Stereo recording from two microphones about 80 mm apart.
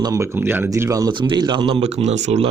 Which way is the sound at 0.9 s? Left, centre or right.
Right.